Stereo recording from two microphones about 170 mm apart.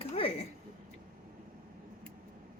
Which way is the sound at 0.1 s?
35° left (ahead or behind).